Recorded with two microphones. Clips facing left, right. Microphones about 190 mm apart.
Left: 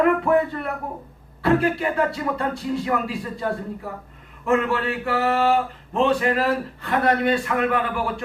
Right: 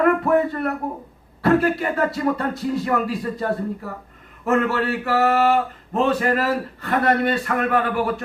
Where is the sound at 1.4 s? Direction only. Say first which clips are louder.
Right 2 dB; 45° right (ahead or behind).